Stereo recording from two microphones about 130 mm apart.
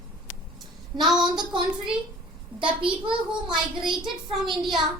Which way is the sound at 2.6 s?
40° right (ahead or behind).